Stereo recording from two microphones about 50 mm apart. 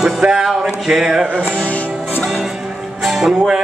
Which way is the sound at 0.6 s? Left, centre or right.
Centre.